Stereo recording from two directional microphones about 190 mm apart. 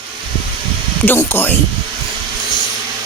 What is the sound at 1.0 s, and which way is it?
Speech, 10° left (ahead or behind).